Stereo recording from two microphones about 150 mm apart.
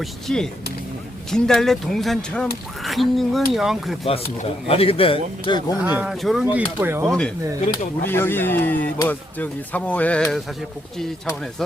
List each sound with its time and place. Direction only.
0.0 s speech: 5° left (ahead or behind)
4.0 s speech: 40° left (ahead or behind)
5.8 s speech: 10° right (ahead or behind)
7.1 s speech: 5° left (ahead or behind)